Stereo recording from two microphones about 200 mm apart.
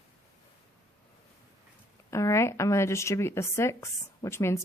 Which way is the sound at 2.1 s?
15° left (ahead or behind).